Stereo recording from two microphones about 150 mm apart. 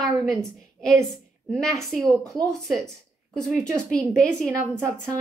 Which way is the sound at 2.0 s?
25° right (ahead or behind).